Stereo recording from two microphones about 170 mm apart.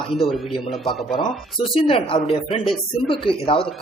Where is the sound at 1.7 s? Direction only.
30° left (ahead or behind).